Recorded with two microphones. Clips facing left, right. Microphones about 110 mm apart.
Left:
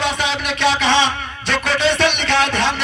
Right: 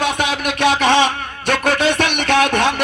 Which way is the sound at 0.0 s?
50° right (ahead or behind).